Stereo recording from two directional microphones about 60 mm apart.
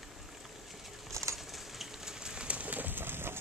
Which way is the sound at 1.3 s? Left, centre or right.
Centre.